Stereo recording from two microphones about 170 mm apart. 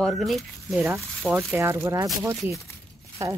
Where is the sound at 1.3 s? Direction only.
15° right (ahead or behind).